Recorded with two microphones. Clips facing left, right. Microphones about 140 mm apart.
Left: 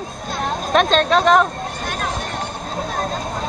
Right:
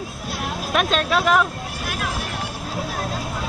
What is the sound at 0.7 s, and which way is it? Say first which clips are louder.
Speech: left 5 dB; 35° left (ahead or behind).